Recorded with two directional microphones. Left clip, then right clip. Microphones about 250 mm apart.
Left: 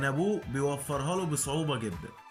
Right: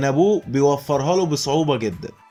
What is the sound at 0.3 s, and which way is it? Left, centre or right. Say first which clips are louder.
A man's voice: right 13 dB; centre.